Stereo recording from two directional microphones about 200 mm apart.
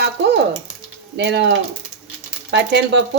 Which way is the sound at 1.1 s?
60° right (ahead or behind).